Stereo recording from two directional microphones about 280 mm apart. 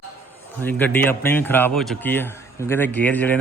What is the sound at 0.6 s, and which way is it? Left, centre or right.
A man's voice, centre.